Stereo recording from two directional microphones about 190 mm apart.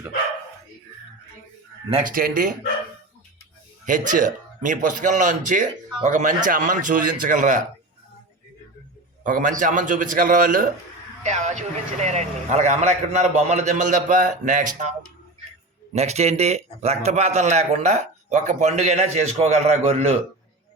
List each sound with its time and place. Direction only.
2.0 s a man's voice: 50° right (ahead or behind)
3.8 s a man's voice: 45° right (ahead or behind)
9.2 s a man's voice: 45° right (ahead or behind)